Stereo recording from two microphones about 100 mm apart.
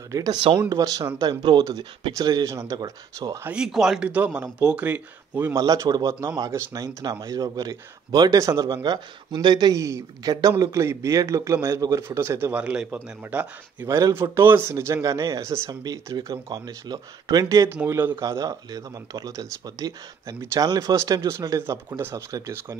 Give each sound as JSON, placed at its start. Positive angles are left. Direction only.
{"t": 0.1, "sound": "speech", "side_deg": -35}
{"t": 3.4, "sound": "a man's voice", "side_deg": -10}
{"t": 4.1, "sound": "a man's voice", "side_deg": -15}
{"t": 5.6, "sound": "speech", "side_deg": -40}
{"t": 6.2, "sound": "speech", "side_deg": -30}
{"t": 9.8, "sound": "speech", "side_deg": -30}
{"t": 12.5, "sound": "a man's voice", "side_deg": -10}
{"t": 13.8, "sound": "speech", "side_deg": -30}
{"t": 17.6, "sound": "speech", "side_deg": -20}
{"t": 18.2, "sound": "speech", "side_deg": -35}